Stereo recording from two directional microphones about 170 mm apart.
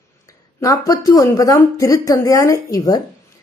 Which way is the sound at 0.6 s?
20° left (ahead or behind).